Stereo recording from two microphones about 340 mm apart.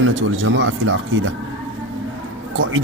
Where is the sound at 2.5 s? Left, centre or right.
Right.